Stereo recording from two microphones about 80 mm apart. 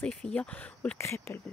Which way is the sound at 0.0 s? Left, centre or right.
Centre.